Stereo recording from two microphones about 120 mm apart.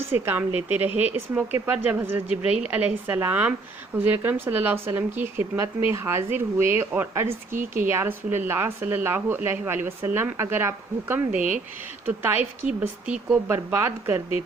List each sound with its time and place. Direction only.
0.1 s speech: 15° right (ahead or behind)
11.3 s speech: 90° right
12.0 s speech: 15° right (ahead or behind)